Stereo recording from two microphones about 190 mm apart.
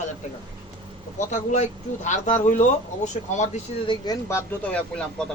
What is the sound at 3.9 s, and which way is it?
Speech, 15° left (ahead or behind).